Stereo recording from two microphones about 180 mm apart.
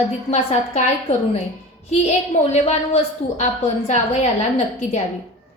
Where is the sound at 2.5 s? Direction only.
35° left (ahead or behind).